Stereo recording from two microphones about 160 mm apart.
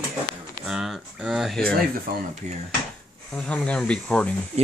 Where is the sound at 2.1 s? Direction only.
70° right (ahead or behind).